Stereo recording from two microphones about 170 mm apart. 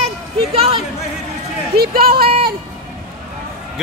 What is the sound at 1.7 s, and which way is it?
Speech, 60° right (ahead or behind).